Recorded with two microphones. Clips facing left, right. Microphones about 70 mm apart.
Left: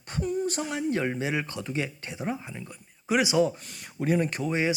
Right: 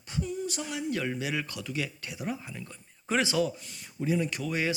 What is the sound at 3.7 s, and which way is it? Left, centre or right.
Speech, left.